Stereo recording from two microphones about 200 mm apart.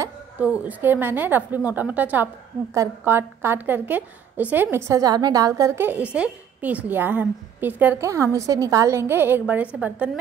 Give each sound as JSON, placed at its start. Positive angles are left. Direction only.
{"t": 0.0, "sound": "a woman's voice", "side_deg": -5}